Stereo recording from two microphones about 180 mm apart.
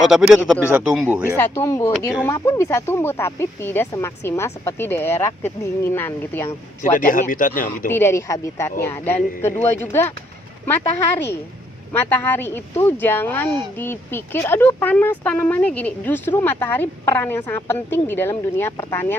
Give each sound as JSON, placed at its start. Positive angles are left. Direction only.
{"t": 0.0, "sound": "a man's voice", "side_deg": 0}
{"t": 1.4, "sound": "speech", "side_deg": 15}
{"t": 6.8, "sound": "speech", "side_deg": 45}
{"t": 7.9, "sound": "speech", "side_deg": 15}
{"t": 11.9, "sound": "speech", "side_deg": 10}